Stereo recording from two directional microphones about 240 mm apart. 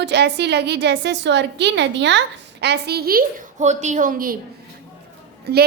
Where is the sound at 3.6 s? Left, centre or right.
Right.